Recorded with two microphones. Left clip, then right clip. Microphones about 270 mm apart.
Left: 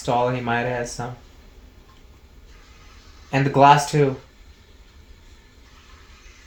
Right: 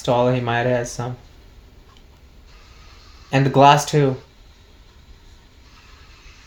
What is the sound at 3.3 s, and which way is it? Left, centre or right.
Speech, right.